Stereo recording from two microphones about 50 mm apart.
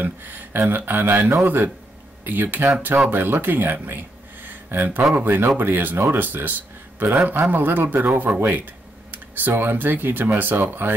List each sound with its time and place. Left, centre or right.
0.0 s a man's voice: right
4.5 s a sound: right
5.1 s a man's voice: right
8.1 s speech: right
8.4 s a man's voice: right